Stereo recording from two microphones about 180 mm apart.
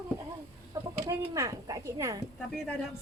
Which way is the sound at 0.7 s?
20° right (ahead or behind).